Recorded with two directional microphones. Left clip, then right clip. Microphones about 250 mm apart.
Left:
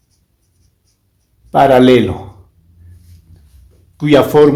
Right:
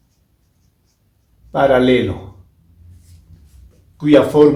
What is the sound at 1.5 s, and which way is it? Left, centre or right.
Speech, left.